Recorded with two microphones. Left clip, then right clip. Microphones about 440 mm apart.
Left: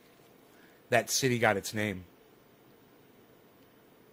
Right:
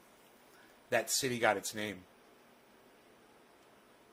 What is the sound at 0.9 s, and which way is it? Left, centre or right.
Speech, left.